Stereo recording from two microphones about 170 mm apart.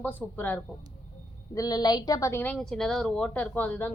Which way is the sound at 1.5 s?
20° left (ahead or behind).